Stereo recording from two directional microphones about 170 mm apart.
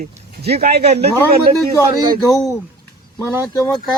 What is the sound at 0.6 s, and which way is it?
Speech, 70° right (ahead or behind).